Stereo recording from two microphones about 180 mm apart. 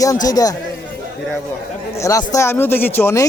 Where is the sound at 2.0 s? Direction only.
15° left (ahead or behind).